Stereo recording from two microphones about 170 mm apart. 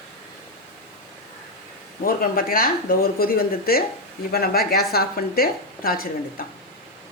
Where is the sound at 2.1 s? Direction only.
60° left (ahead or behind).